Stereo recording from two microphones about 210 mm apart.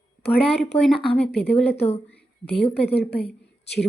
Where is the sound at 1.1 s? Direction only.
5° left (ahead or behind).